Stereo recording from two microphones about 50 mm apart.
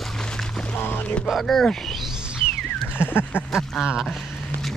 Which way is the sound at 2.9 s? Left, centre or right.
Left.